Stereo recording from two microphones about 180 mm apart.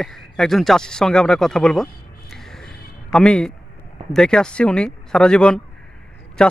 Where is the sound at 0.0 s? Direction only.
Centre (ahead or behind).